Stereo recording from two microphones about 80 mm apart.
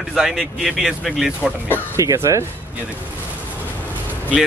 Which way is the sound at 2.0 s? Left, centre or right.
Right.